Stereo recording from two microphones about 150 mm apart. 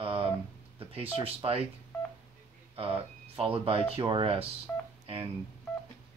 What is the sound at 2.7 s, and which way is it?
Speech, 40° right (ahead or behind).